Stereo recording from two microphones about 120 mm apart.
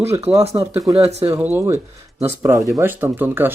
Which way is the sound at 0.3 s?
5° right (ahead or behind).